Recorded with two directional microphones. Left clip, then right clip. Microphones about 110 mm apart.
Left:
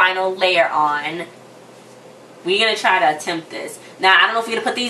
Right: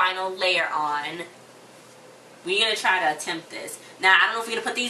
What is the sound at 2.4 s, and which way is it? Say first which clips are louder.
Speech: left 6 dB; 10° right (ahead or behind).